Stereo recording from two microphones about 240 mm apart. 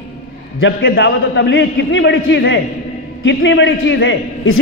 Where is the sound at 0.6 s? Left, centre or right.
Left.